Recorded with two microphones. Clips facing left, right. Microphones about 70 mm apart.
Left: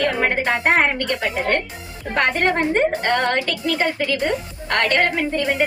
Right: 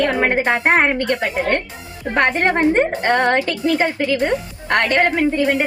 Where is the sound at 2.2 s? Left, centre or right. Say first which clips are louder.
Right 3 dB; right.